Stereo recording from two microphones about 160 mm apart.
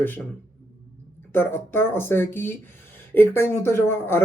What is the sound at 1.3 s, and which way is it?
Speech, 15° left (ahead or behind).